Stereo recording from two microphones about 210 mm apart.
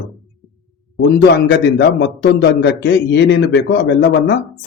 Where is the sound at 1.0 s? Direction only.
50° left (ahead or behind).